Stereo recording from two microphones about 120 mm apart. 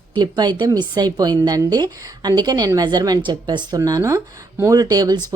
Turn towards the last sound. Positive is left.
turn(degrees=-35)  # may be behind; listen again after turning